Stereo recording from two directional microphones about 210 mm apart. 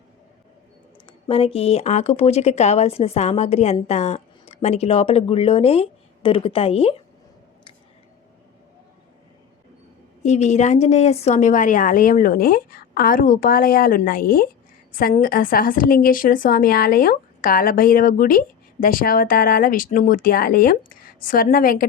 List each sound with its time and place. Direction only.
1.0 s speech: 25° left (ahead or behind)
10.2 s a woman's voice: 35° left (ahead or behind)